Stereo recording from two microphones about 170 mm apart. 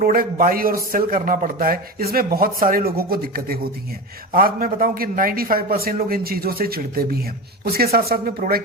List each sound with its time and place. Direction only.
0.0 s a man's voice: 55° right (ahead or behind)